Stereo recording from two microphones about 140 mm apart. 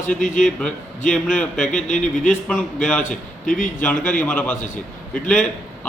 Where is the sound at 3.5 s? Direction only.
70° left (ahead or behind).